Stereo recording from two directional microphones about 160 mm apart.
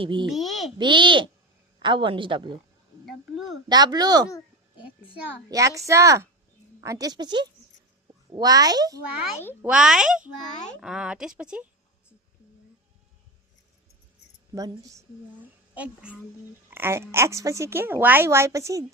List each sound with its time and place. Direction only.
0.0 s speech: 30° right (ahead or behind)
0.3 s a child's voice: centre (ahead or behind)
0.8 s speech: 30° right (ahead or behind)
3.7 s speech: 25° right (ahead or behind)
5.5 s speech: 20° right (ahead or behind)
9.6 s speech: 5° right (ahead or behind)
14.5 s speech: 20° right (ahead or behind)
15.7 s a child's voice: 10° right (ahead or behind)